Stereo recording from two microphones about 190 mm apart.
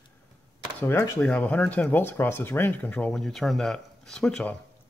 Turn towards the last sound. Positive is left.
turn(degrees=5)  # may be behind; listen again after turning